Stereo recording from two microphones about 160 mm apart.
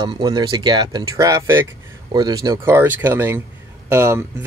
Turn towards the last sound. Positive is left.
turn(degrees=-15)  # may be behind; listen again after turning